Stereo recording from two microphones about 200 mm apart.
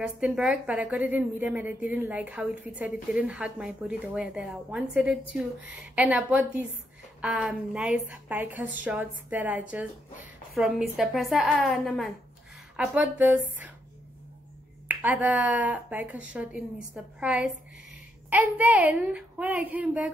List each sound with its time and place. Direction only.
0.0 s a woman's voice: 5° right (ahead or behind)
14.9 s speech: 10° right (ahead or behind)